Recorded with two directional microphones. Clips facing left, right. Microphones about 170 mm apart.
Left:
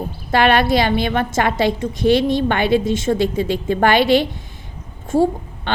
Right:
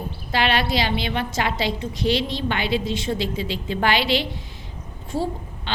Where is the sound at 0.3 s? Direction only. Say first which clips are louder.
Left 7 dB; 50° left (ahead or behind).